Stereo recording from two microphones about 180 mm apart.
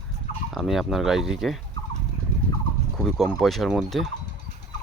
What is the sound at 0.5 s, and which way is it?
Speech, centre (ahead or behind).